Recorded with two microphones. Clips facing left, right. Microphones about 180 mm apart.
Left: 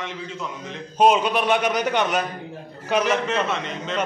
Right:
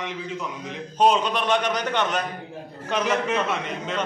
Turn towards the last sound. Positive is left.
turn(degrees=-10)  # may be behind; listen again after turning